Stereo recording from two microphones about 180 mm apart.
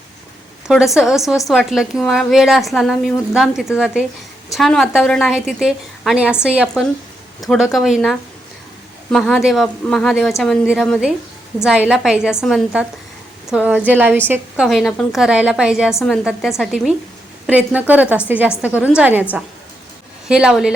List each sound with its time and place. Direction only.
0.7 s a woman's voice: centre (ahead or behind)